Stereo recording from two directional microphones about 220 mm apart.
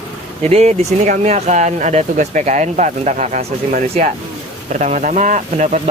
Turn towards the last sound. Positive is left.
turn(degrees=-35)  # may be behind; listen again after turning